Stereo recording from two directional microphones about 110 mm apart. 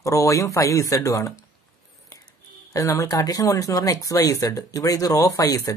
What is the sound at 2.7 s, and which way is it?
Speech, 30° left (ahead or behind).